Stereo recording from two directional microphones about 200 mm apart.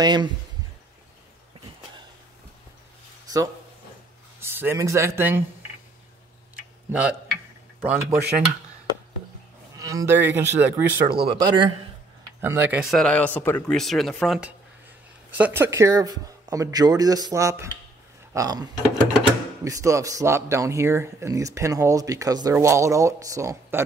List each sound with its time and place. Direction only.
0.0 s speech: 20° right (ahead or behind)
3.3 s speech: 20° right (ahead or behind)
6.5 s tick-tock: 5° right (ahead or behind)
7.8 s speech: 10° right (ahead or behind)
9.8 s speech: 15° right (ahead or behind)
11.2 s speech: 20° right (ahead or behind)
12.4 s speech: 10° right (ahead or behind)
12.9 s speech: 5° left (ahead or behind); by 23.8 s 15° right (ahead or behind)